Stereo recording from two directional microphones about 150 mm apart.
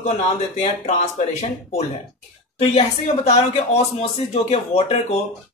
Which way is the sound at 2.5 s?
45° left (ahead or behind).